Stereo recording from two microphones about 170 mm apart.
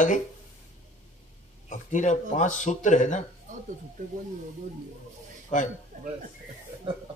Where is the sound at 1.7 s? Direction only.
45° left (ahead or behind).